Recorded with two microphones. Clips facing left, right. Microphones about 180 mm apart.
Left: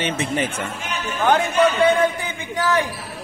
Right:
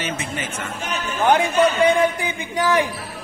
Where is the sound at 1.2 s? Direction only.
10° right (ahead or behind).